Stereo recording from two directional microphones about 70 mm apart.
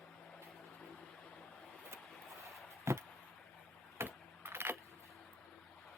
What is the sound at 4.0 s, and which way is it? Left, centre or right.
Keys jangling, right.